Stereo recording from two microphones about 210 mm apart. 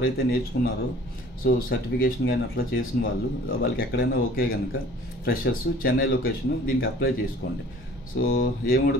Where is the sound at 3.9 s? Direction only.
50° left (ahead or behind).